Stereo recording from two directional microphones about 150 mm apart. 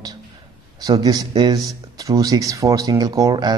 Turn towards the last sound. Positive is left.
turn(degrees=-25)  # may be behind; listen again after turning